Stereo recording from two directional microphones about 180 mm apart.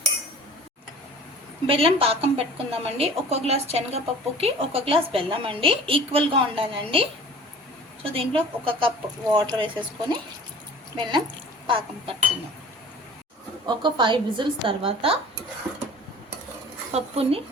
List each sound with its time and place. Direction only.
1.6 s a woman's voice: 30° right (ahead or behind)
10.9 s a woman's voice: 25° right (ahead or behind)
13.7 s a woman's voice: 25° right (ahead or behind)
16.9 s a woman's voice: 35° right (ahead or behind)